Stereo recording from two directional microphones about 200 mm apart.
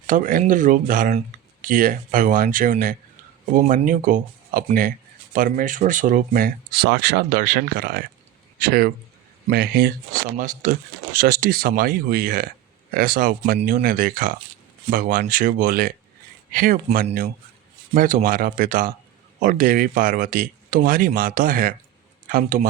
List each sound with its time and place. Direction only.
0.1 s speech: 45° right (ahead or behind)